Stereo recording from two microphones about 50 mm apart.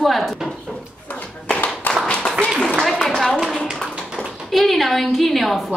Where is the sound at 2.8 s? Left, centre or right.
Centre.